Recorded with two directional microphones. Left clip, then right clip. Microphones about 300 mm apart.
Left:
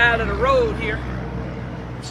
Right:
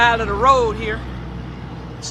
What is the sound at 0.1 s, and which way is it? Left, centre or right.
Speech, centre.